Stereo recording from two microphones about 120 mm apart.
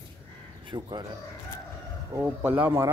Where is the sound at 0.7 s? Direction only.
40° right (ahead or behind).